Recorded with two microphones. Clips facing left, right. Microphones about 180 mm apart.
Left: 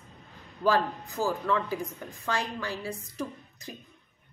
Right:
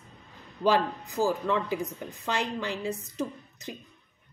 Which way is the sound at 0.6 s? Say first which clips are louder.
Right 1 dB; 15° right (ahead or behind).